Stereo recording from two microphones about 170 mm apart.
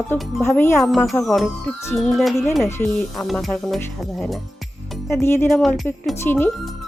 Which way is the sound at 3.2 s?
Centre (ahead or behind).